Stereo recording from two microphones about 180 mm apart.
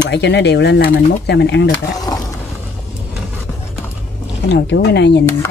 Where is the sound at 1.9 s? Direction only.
20° left (ahead or behind).